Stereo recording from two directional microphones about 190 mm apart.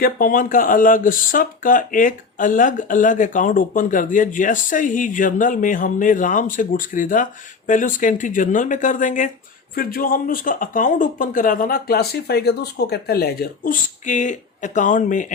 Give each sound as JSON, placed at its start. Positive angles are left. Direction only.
{"t": 0.0, "sound": "speech", "side_deg": 50}